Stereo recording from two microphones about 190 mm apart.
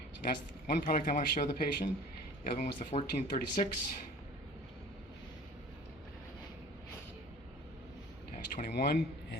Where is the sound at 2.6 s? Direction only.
40° left (ahead or behind).